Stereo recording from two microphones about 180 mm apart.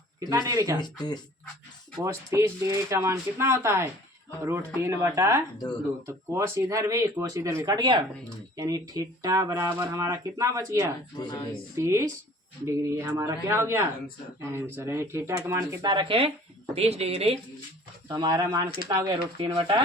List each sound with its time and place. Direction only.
0.2 s speech: 20° right (ahead or behind)
0.8 s speech: 25° left (ahead or behind)
2.0 s speech: 15° right (ahead or behind); by 17.4 s 35° right (ahead or behind)
18.1 s speech: 20° right (ahead or behind)